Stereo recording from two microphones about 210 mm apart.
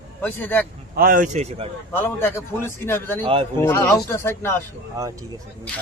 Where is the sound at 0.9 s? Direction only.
40° right (ahead or behind).